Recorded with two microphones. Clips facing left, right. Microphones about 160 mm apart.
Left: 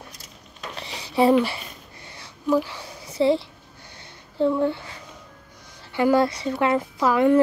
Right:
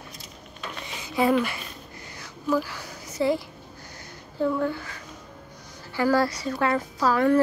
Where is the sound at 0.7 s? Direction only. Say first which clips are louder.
Left 4 dB; 30° left (ahead or behind).